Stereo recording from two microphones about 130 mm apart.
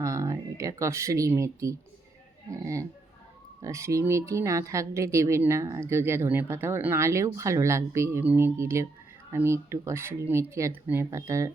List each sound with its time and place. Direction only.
0.0 s a woman's voice: 25° right (ahead or behind)